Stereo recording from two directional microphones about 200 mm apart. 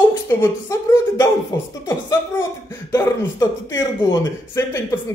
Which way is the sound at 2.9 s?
15° left (ahead or behind).